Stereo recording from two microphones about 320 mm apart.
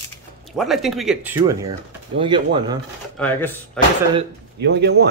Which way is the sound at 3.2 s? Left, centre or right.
Centre.